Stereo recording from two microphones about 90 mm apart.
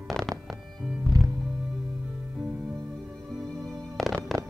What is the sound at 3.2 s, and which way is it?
Music, centre (ahead or behind).